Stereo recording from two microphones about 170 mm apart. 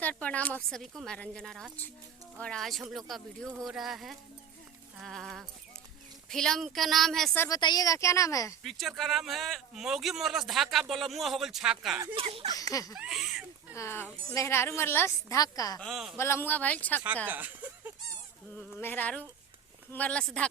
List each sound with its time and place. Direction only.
0.0 s a woman's voice: 10° left (ahead or behind)
7.3 s a woman's voice: 20° left (ahead or behind)
8.6 s a man's voice: centre (ahead or behind)
12.1 s speech: 35° right (ahead or behind)
12.9 s speech: centre (ahead or behind)
13.7 s a woman's voice: 15° left (ahead or behind)
15.8 s a man's voice: centre (ahead or behind)
16.1 s a woman's voice: 15° left (ahead or behind)
17.2 s speech: 10° right (ahead or behind)
18.8 s a woman's voice: 10° left (ahead or behind)